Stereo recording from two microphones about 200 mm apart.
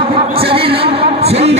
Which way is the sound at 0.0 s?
25° right (ahead or behind).